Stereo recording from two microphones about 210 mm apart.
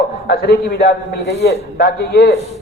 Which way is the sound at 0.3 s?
50° left (ahead or behind).